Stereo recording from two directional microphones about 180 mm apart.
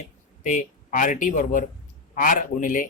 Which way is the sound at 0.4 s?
45° left (ahead or behind).